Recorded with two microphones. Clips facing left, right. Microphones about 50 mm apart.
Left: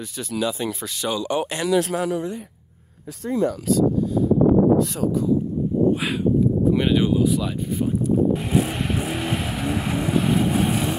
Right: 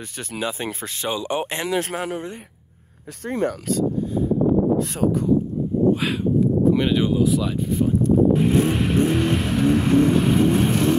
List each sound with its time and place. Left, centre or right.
0.3 s speech: right
1.1 s speech: right
5.0 s speech: right
6.7 s speech: centre